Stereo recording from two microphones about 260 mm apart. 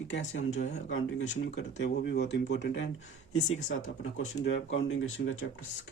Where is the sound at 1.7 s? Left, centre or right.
Left.